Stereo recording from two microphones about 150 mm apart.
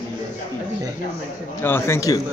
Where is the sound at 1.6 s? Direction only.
15° left (ahead or behind).